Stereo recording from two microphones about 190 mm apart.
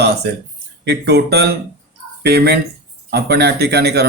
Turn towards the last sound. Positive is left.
turn(degrees=-60)  # may be behind; listen again after turning